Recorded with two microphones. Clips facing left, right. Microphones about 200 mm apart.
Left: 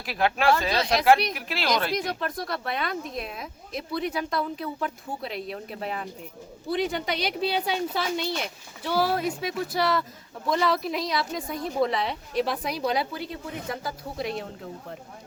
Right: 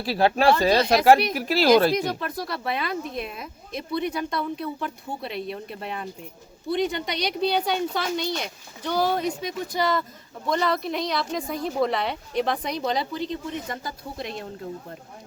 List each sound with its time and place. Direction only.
0.0 s speech: 30° right (ahead or behind)
0.9 s speech: 45° right (ahead or behind)
2.0 s a woman's voice: centre (ahead or behind)